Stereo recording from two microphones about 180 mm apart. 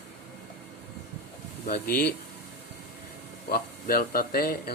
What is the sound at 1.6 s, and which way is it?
Speech, 55° left (ahead or behind).